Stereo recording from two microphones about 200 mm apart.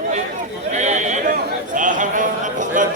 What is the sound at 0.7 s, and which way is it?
Speech, 35° right (ahead or behind).